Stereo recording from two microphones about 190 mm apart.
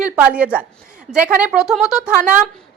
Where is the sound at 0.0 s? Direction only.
5° right (ahead or behind).